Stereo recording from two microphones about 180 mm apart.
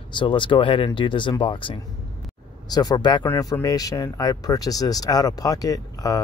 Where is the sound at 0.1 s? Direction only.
25° left (ahead or behind).